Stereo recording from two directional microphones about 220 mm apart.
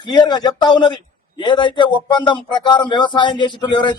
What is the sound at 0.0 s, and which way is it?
Speech, 20° left (ahead or behind).